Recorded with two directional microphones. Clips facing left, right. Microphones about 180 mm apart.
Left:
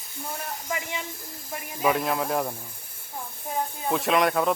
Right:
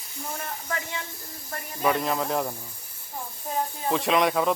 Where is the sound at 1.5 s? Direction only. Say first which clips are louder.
Left 1 dB; 5° left (ahead or behind).